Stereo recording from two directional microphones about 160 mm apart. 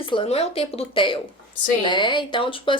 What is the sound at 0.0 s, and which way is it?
A woman's voice, 35° left (ahead or behind).